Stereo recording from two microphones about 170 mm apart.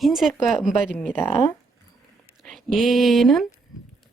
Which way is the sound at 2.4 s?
Centre (ahead or behind).